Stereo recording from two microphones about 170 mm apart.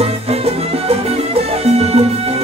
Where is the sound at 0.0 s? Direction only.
35° right (ahead or behind).